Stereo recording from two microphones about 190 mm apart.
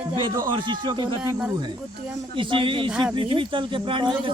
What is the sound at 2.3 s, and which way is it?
Speech, 25° right (ahead or behind).